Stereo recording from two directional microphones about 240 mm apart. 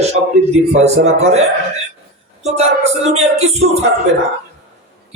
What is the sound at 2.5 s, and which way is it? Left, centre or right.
Speech, right.